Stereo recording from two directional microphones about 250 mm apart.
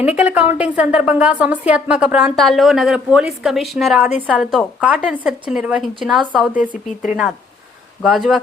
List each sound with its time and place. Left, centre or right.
0.0 s a woman's voice: centre